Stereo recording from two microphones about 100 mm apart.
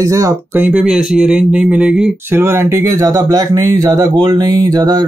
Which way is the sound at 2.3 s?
25° right (ahead or behind).